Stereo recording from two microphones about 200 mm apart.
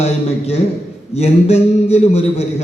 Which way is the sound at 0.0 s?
30° left (ahead or behind).